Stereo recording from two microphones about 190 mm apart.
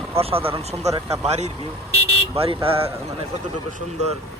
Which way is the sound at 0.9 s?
15° right (ahead or behind).